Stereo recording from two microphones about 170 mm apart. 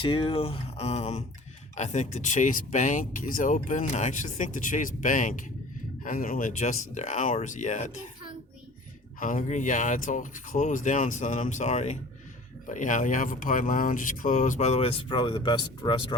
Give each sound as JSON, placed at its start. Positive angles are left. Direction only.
{"t": 0.0, "sound": "speech", "side_deg": 30}
{"t": 9.2, "sound": "speech", "side_deg": 50}